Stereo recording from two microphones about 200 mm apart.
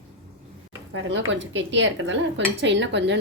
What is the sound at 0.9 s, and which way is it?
Speech, 60° right (ahead or behind).